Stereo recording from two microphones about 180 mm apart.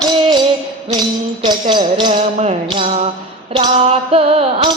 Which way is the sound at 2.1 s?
45° right (ahead or behind).